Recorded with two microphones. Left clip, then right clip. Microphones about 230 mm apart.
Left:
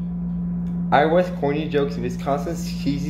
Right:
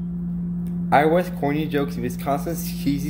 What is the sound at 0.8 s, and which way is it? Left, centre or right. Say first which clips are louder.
Speech: left 1 dB; right.